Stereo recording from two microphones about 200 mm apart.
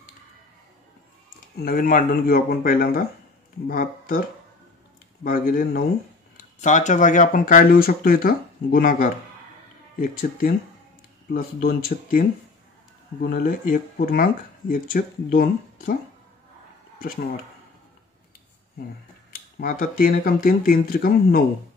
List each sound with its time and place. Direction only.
1.6 s speech: 45° left (ahead or behind)
5.2 s speech: 45° left (ahead or behind)
19.3 s speech: 45° left (ahead or behind)